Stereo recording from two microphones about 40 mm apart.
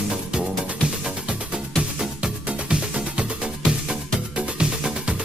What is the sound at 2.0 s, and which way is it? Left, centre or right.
Music, right.